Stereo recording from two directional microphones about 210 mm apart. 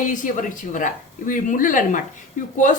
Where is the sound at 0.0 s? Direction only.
40° left (ahead or behind).